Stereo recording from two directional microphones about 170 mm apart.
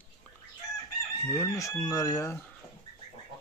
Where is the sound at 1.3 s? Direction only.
15° left (ahead or behind).